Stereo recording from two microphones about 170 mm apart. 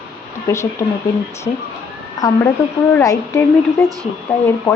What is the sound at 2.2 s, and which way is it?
Speech, 20° left (ahead or behind).